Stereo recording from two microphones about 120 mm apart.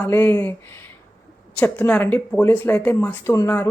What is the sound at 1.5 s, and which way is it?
A woman's voice, 15° left (ahead or behind).